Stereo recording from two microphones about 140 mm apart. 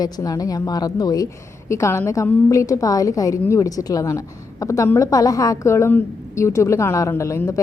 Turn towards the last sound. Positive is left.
turn(degrees=20)  # may be behind; listen again after turning